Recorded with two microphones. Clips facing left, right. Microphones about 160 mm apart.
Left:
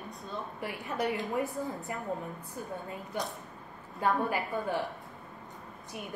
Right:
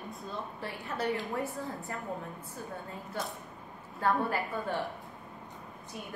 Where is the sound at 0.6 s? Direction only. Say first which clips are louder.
Left 3 dB; 15° left (ahead or behind).